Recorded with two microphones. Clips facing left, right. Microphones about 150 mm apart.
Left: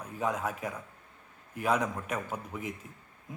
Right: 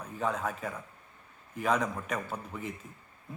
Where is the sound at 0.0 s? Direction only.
10° left (ahead or behind).